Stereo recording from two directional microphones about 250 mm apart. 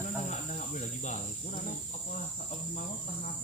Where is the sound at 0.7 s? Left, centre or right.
Left.